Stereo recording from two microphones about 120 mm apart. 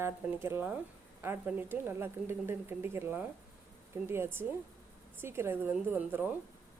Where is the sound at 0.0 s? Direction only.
20° right (ahead or behind).